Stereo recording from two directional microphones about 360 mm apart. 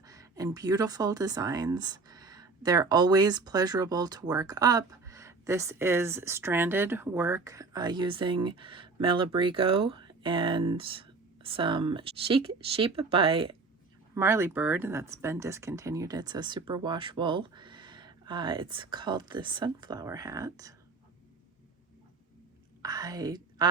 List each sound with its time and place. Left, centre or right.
0.0 s speech: centre
22.8 s a woman's voice: centre